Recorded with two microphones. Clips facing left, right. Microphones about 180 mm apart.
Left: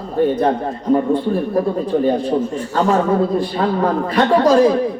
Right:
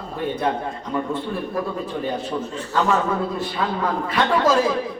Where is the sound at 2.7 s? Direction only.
45° left (ahead or behind).